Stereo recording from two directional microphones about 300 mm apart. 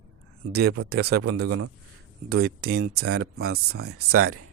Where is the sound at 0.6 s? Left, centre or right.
Right.